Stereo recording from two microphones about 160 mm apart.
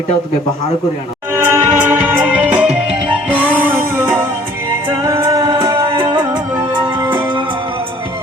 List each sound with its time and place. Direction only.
1.5 s music: 10° right (ahead or behind)
5.5 s music: 30° right (ahead or behind)